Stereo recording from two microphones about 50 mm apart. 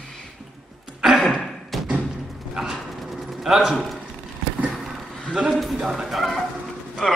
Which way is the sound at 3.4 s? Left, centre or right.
Centre.